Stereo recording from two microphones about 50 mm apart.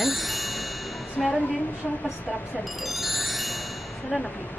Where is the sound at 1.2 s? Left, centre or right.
Centre.